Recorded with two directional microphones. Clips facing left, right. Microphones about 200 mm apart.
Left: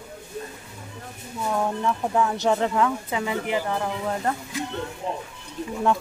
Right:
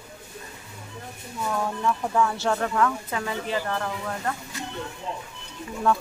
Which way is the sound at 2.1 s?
15° left (ahead or behind).